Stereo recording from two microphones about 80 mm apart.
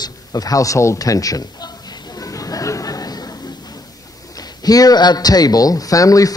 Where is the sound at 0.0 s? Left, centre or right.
Left.